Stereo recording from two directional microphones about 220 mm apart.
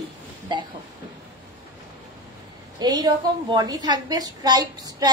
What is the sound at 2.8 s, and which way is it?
A woman's voice, 15° right (ahead or behind).